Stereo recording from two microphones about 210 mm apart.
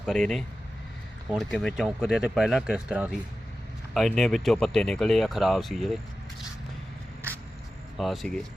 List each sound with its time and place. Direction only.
0.0 s speech: centre (ahead or behind)
7.9 s speech: centre (ahead or behind)